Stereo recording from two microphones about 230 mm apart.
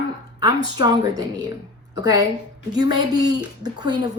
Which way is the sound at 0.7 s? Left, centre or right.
Centre.